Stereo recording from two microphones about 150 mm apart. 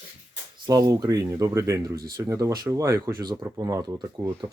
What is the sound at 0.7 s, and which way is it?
Speech, 25° right (ahead or behind).